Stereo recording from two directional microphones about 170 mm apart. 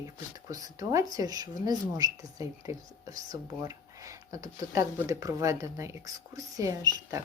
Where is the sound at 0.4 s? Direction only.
20° right (ahead or behind).